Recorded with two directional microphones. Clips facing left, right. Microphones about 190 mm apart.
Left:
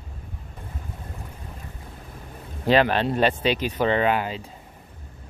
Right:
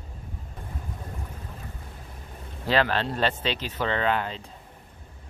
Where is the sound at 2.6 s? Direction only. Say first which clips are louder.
Left 5 dB; 15° left (ahead or behind).